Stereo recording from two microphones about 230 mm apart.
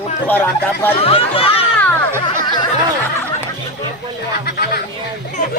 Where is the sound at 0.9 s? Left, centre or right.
Left.